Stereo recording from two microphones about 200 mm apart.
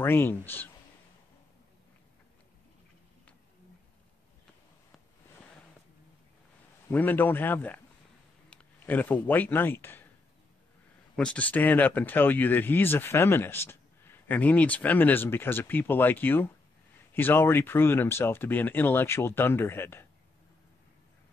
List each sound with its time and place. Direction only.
0.0 s speech: 10° left (ahead or behind)
6.9 s speech: 10° left (ahead or behind)
11.1 s speech: 5° left (ahead or behind)